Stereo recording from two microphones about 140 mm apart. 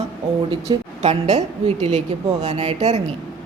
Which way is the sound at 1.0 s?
55° right (ahead or behind).